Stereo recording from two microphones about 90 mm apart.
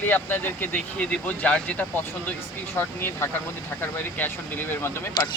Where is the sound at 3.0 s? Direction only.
30° left (ahead or behind).